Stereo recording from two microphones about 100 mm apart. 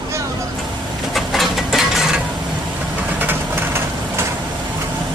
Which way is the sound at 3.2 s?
20° right (ahead or behind).